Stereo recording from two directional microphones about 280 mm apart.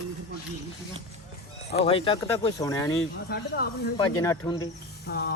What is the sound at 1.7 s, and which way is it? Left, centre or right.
Speech, left.